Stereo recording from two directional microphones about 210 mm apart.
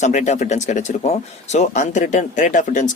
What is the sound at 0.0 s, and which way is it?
Speech, 35° left (ahead or behind).